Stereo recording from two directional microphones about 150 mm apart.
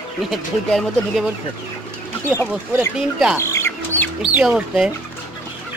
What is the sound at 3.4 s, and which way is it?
Squawk, 20° left (ahead or behind).